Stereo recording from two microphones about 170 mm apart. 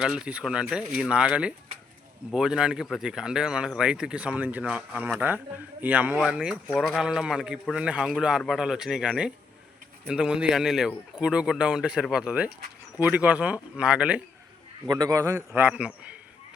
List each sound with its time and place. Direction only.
0.0 s speech: 5° right (ahead or behind)
14.8 s a man's voice: 20° right (ahead or behind)